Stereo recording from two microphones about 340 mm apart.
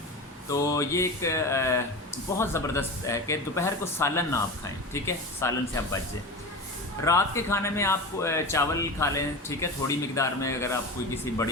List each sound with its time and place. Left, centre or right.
0.5 s speech: centre
7.0 s speech: centre